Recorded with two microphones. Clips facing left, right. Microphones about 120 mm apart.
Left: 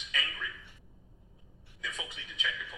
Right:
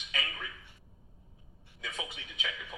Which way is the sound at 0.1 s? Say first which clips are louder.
Even; 40° right (ahead or behind).